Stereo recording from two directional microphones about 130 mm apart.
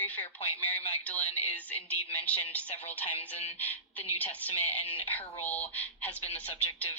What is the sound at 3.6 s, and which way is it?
A woman's voice, 10° left (ahead or behind).